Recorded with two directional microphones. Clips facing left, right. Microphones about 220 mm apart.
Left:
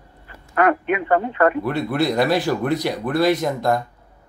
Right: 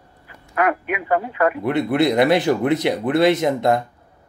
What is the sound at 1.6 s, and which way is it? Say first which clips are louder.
Speech: right 3 dB; 20° right (ahead or behind).